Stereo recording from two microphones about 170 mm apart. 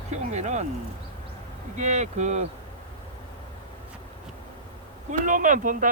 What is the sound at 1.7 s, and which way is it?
Speech, 45° right (ahead or behind).